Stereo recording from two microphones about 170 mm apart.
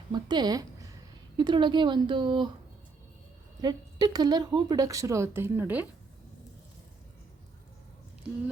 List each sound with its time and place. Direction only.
0.1 s a woman's voice: 25° right (ahead or behind)
3.6 s a woman's voice: 25° right (ahead or behind)